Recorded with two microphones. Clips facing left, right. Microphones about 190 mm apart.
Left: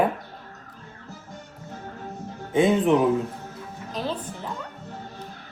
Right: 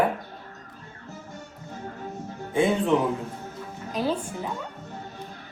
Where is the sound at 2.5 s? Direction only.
20° left (ahead or behind).